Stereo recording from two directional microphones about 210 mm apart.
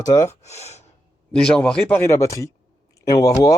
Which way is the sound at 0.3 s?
30° left (ahead or behind).